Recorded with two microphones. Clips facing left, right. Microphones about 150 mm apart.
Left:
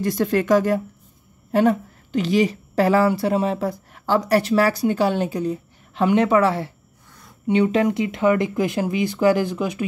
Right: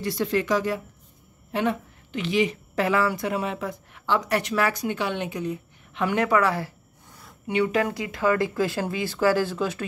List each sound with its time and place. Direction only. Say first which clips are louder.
0.0 s a woman's voice: left 5 dB; 50° left (ahead or behind); by 9.8 s 15° left (ahead or behind)